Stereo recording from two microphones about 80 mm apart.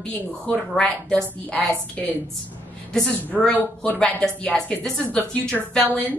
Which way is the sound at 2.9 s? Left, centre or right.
Centre.